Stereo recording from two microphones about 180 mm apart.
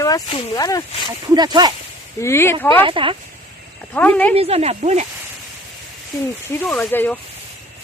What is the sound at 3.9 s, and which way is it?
Speech, 10° left (ahead or behind).